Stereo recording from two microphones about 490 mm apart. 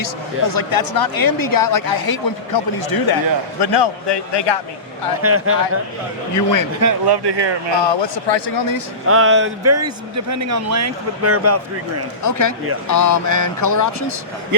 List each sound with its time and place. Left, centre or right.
0.0 s a man's voice: left
5.2 s speech: right
6.3 s speech: left
7.1 s speech: right
7.8 s a man's voice: left
9.0 s a man's voice: right
12.2 s speech: left